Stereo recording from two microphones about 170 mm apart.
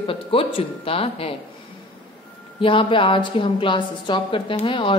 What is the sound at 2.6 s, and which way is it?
A woman's voice, 30° left (ahead or behind).